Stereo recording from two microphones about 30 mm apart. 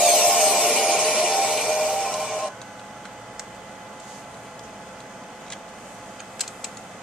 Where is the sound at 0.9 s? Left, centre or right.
Centre.